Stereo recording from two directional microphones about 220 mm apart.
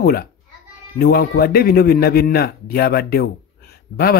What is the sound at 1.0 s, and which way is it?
A man's voice, 45° left (ahead or behind).